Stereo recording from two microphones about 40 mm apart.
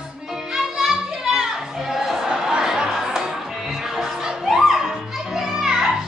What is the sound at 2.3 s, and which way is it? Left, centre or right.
Music, centre.